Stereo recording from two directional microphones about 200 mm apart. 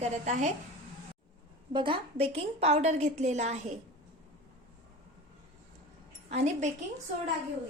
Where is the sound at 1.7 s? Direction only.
25° right (ahead or behind).